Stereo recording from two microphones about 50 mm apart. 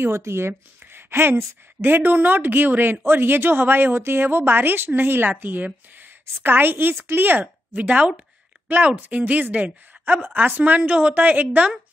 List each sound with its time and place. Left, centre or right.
0.0 s speech: right
9.1 s a woman's voice: right
10.8 s a woman's voice: right